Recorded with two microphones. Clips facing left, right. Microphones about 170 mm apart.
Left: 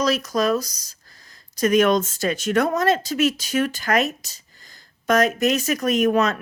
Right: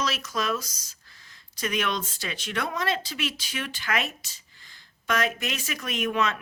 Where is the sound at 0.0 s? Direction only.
40° left (ahead or behind).